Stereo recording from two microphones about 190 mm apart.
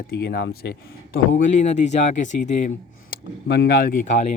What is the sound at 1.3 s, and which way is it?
Speech, 40° left (ahead or behind).